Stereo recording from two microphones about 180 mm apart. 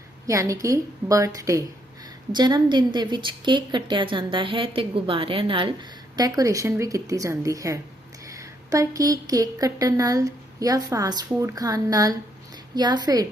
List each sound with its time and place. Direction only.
0.3 s a woman's voice: 15° right (ahead or behind)